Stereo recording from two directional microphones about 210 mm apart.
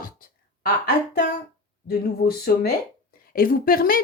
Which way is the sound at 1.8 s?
45° left (ahead or behind).